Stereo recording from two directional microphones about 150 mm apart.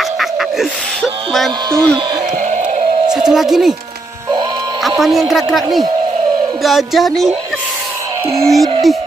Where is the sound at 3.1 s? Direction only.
5° right (ahead or behind).